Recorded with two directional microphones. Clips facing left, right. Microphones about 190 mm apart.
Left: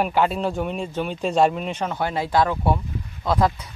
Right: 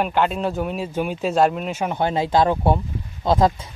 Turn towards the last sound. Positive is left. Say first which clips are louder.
# right 3 dB
turn(degrees=-25)  # may be behind; listen again after turning